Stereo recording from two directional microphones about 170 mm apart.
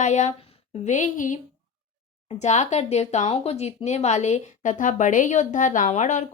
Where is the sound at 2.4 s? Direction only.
45° left (ahead or behind).